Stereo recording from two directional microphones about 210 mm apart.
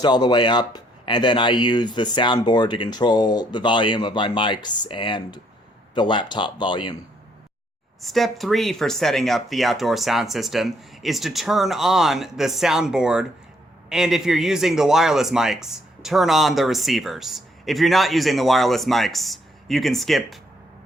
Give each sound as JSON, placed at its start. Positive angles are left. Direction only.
{"t": 0.0, "sound": "speech", "side_deg": 20}
{"t": 8.0, "sound": "speech", "side_deg": 0}